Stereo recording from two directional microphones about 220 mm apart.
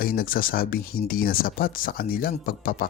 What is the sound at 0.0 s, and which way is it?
Speech, 40° left (ahead or behind).